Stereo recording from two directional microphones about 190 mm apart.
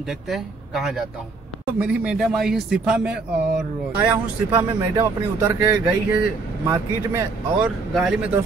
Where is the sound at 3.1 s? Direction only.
60° right (ahead or behind).